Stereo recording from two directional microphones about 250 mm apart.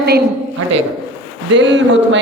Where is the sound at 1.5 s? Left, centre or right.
Right.